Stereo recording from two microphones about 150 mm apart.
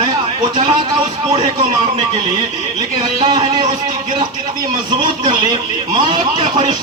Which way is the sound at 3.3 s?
25° right (ahead or behind).